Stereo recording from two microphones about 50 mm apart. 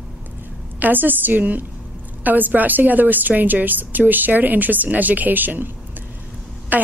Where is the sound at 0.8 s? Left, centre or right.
Right.